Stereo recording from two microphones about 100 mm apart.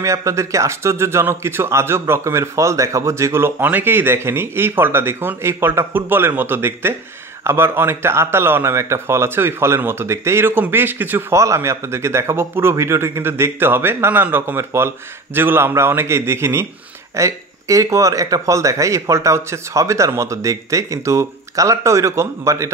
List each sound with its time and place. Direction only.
0.0 s a man's voice: 30° right (ahead or behind)